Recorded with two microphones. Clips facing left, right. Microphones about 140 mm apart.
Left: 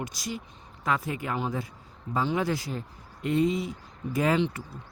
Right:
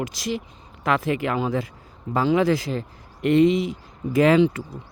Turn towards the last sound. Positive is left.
turn(degrees=-90)